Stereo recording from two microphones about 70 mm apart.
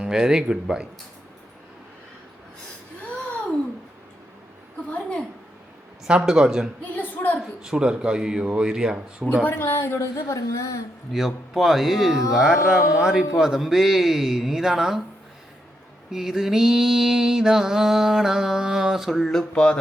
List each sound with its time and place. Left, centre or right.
0.0 s mantra: centre
4.9 s a sound: centre
6.1 s mantra: centre
6.9 s a sound: left
7.6 s mantra: centre
9.4 s a woman's voice: left
11.1 s a man's voice: centre
12.3 s mantra: centre
13.0 s a man's voice: centre
16.1 s mantra: centre
19.1 s a sound: centre